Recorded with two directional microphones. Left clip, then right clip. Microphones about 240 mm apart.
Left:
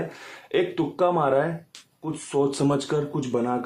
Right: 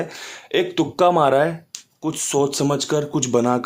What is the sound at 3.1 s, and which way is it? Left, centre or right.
Speech, right.